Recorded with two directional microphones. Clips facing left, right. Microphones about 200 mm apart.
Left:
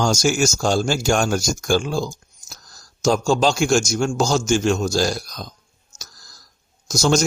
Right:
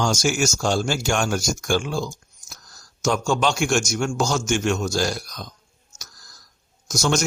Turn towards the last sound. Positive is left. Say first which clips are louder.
# left 4 dB
turn(degrees=35)  # may be behind; listen again after turning